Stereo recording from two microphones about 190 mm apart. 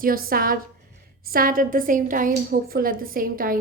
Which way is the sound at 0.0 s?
50° right (ahead or behind).